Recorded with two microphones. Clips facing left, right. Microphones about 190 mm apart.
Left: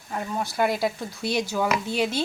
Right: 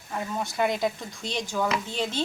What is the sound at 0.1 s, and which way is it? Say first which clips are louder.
Speech: left 2 dB; centre (ahead or behind).